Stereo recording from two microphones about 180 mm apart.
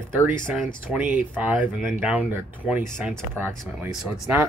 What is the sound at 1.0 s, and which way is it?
Speech, 10° right (ahead or behind).